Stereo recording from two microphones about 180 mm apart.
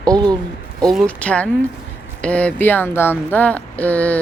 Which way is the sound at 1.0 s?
5° left (ahead or behind).